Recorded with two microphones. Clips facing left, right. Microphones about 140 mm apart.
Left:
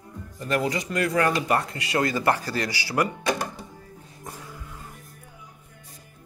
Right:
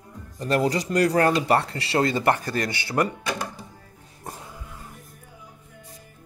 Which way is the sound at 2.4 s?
50° right (ahead or behind).